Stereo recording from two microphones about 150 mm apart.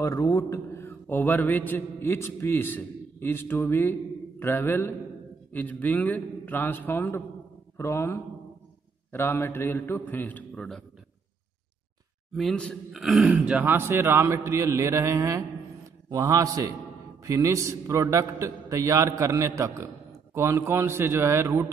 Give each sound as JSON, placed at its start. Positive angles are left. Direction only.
{"t": 0.0, "sound": "a man's voice", "side_deg": 20}
{"t": 12.4, "sound": "a man's voice", "side_deg": 5}